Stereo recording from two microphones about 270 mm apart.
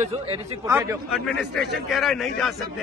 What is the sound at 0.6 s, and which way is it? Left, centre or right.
A man's voice, centre.